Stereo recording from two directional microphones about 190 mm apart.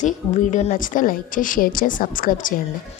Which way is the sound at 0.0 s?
40° left (ahead or behind).